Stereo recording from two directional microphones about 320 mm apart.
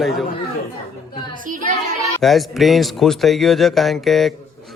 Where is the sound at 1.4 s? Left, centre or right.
Right.